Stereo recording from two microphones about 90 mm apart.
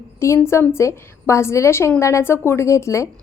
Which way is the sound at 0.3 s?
25° left (ahead or behind).